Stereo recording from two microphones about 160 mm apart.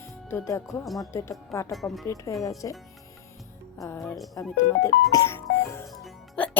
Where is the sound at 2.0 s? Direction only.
20° left (ahead or behind).